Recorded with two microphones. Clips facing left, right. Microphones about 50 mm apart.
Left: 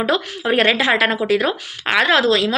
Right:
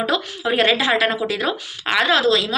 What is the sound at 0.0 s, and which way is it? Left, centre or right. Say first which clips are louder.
A woman's voice: left 2 dB; left.